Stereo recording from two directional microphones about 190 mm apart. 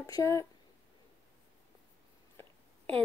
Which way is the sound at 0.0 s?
15° left (ahead or behind).